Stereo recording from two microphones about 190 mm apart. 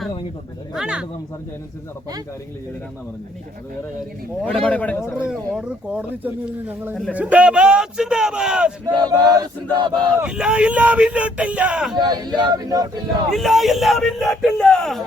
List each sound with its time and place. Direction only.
0.7 s speech: 5° right (ahead or behind)
4.6 s a man's voice: 10° left (ahead or behind)
5.1 s speech: 5° right (ahead or behind)
8.9 s chant: 20° right (ahead or behind)
10.2 s speech: 5° right (ahead or behind)
11.9 s chant: 20° right (ahead or behind)
13.3 s speech: centre (ahead or behind)